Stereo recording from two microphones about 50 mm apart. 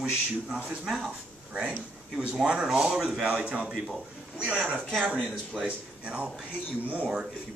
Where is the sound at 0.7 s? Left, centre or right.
Centre.